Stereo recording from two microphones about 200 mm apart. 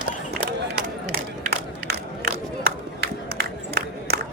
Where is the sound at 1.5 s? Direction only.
50° right (ahead or behind).